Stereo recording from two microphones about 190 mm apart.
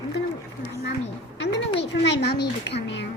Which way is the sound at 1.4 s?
70° left (ahead or behind).